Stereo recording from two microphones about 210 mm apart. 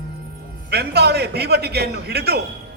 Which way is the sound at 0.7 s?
50° right (ahead or behind).